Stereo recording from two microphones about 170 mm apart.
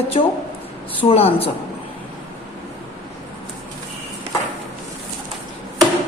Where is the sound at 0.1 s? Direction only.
35° left (ahead or behind).